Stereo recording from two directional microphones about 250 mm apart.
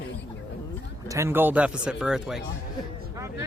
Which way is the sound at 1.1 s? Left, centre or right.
Centre.